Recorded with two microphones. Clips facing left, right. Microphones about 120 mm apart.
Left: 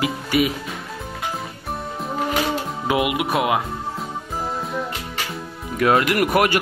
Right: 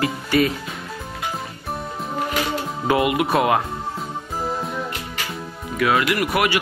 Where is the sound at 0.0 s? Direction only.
10° left (ahead or behind).